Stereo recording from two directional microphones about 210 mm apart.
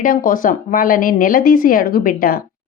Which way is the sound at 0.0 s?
40° left (ahead or behind).